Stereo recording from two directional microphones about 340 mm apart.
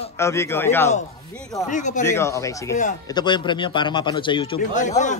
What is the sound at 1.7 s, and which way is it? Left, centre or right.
Speech, left.